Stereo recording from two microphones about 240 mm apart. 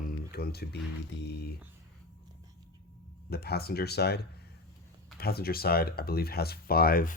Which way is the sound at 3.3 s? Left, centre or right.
Left.